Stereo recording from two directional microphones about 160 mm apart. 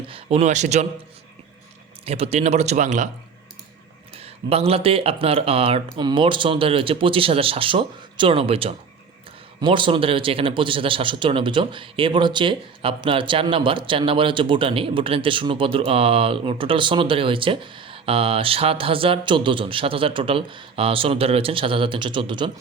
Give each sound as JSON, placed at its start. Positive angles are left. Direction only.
{"t": 0.1, "sound": "speech", "side_deg": -40}
{"t": 2.0, "sound": "speech", "side_deg": -40}
{"t": 4.2, "sound": "a man's voice", "side_deg": -40}